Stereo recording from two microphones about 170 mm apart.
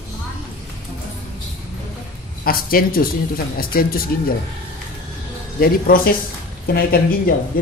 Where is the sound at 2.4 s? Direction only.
60° left (ahead or behind).